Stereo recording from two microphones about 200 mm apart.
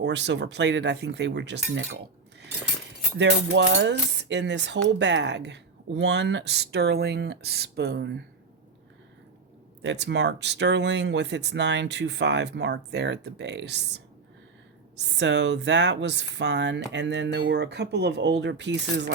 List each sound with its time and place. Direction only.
0.0 s speech: 60° right (ahead or behind)
3.2 s speech: 65° right (ahead or behind)
9.8 s speech: 60° right (ahead or behind)